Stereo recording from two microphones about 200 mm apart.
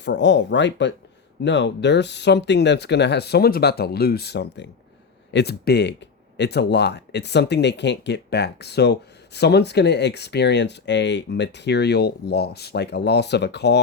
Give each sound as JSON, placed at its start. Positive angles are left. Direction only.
{"t": 0.0, "sound": "speech", "side_deg": 60}